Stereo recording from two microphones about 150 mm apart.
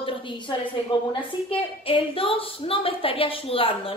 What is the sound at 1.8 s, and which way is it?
A woman's voice, 35° left (ahead or behind).